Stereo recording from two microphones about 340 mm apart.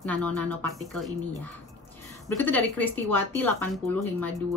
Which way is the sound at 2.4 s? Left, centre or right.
Centre.